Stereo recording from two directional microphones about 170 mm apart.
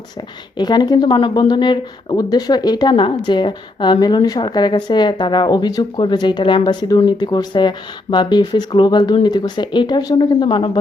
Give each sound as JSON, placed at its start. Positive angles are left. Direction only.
{"t": 0.5, "sound": "a woman's voice", "side_deg": 25}